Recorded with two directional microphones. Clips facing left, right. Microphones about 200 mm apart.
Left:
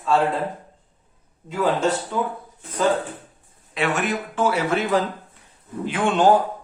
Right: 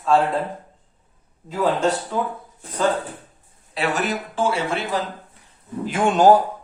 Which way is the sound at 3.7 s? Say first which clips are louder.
Even; 35° right (ahead or behind).